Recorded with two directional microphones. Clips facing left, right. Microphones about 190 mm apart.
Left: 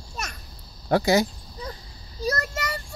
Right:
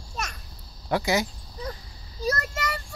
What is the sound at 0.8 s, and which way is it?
Speech, 35° left (ahead or behind).